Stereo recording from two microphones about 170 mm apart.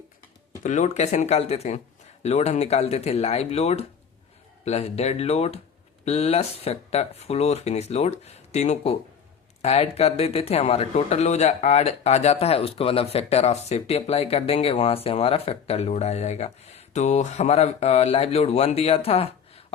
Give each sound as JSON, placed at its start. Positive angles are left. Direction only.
{"t": 0.6, "sound": "speech", "side_deg": 45}